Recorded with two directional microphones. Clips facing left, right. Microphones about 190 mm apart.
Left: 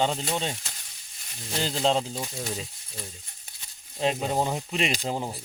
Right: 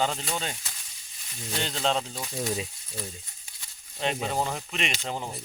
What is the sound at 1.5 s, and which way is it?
Speech, 30° left (ahead or behind).